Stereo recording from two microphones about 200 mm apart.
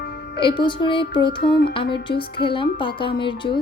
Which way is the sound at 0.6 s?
25° left (ahead or behind).